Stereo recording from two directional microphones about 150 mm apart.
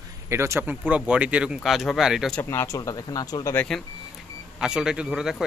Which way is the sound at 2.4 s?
15° left (ahead or behind).